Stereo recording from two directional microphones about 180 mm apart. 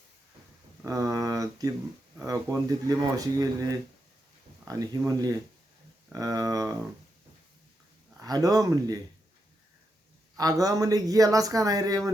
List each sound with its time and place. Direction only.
0.9 s a man's voice: 20° right (ahead or behind)
8.2 s a man's voice: 20° right (ahead or behind)
10.3 s a man's voice: 20° right (ahead or behind)